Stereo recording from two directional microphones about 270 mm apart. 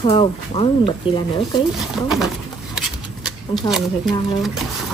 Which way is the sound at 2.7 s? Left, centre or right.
Centre.